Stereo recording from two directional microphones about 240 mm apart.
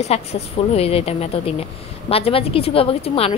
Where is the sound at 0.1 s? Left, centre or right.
Left.